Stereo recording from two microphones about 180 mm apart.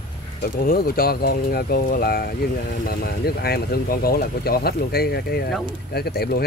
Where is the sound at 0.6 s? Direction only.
55° left (ahead or behind).